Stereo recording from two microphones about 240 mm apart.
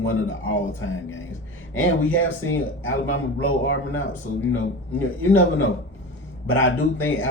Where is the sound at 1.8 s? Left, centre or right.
Left.